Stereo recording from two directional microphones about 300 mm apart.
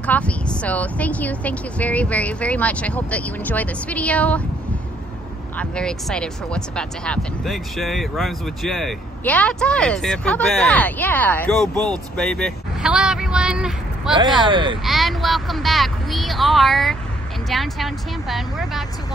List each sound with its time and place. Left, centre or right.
0.0 s speech: centre
5.6 s speech: centre
14.1 s speech: centre
14.9 s speech: centre